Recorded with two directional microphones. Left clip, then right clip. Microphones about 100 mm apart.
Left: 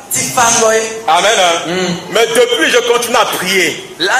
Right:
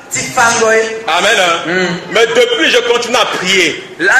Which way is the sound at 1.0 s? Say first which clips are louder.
Left 3 dB; 55° right (ahead or behind).